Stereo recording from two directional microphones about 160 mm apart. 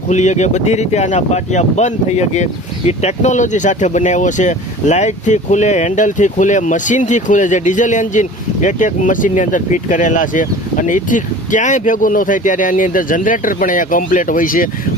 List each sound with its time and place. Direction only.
0.1 s speech: 45° left (ahead or behind)